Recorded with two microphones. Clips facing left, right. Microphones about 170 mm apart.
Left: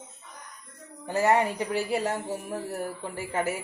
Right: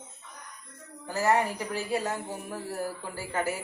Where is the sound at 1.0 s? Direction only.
25° left (ahead or behind).